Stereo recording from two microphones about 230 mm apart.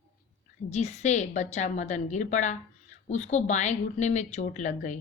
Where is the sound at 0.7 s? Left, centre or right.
Left.